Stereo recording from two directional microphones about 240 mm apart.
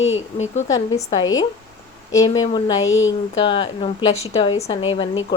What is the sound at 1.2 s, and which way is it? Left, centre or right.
Speech, left.